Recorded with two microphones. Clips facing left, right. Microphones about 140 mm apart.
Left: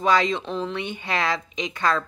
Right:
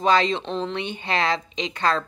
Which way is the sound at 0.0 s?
25° right (ahead or behind).